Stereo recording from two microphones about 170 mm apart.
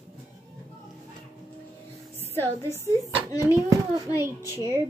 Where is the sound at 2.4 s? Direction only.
15° left (ahead or behind).